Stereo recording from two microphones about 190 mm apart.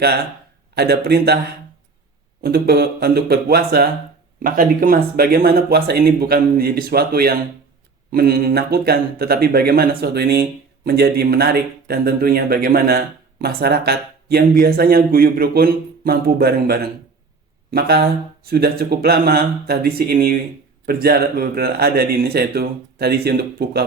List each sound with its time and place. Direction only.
0.8 s speech: 55° right (ahead or behind)
2.4 s speech: 55° right (ahead or behind)